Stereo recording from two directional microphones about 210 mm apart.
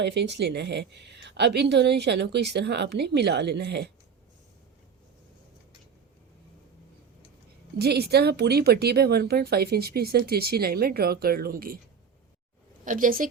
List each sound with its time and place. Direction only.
0.0 s a woman's voice: 55° right (ahead or behind)
7.8 s a woman's voice: 50° right (ahead or behind)
12.8 s a woman's voice: 40° right (ahead or behind)